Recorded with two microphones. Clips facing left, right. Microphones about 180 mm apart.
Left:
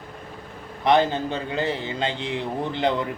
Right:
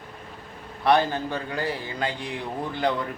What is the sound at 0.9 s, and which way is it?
A man's voice, 20° left (ahead or behind).